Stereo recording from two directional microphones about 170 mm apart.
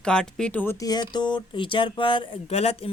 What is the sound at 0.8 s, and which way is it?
A woman's voice, 25° left (ahead or behind).